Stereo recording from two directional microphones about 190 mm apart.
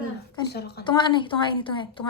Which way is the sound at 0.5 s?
60° left (ahead or behind).